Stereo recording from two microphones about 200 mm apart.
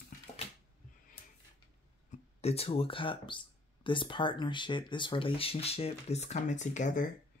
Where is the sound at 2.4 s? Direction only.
30° left (ahead or behind).